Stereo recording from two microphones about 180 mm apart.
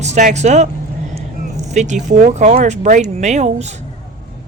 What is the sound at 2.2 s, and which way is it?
Speech, 45° right (ahead or behind).